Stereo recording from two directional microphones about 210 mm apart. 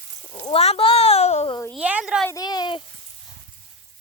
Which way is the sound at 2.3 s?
20° left (ahead or behind).